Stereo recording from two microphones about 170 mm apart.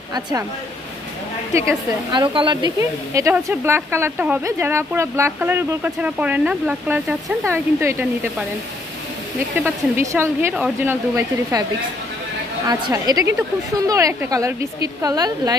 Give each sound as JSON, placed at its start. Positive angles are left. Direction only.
{"t": 0.1, "sound": "a woman's voice", "side_deg": -25}
{"t": 1.7, "sound": "speech", "side_deg": -25}
{"t": 9.6, "sound": "speech", "side_deg": -15}
{"t": 12.6, "sound": "a woman's voice", "side_deg": -20}